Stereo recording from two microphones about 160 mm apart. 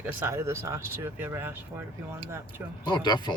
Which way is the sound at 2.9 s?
30° left (ahead or behind).